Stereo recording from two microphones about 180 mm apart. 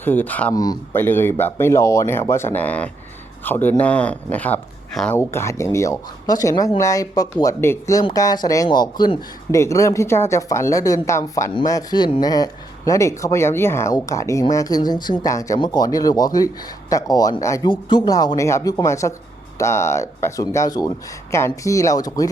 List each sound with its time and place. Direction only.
0.0 s speech: 10° left (ahead or behind)
0.5 s speech: 20° left (ahead or behind)